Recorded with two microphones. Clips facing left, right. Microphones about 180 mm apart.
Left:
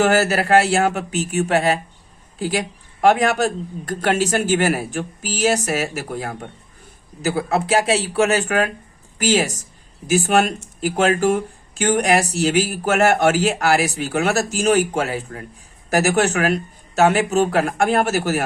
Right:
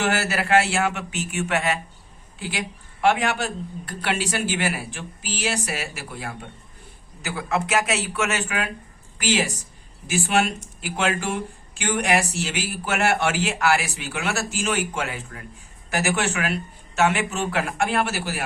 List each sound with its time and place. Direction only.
0.0 s a man's voice: 40° left (ahead or behind)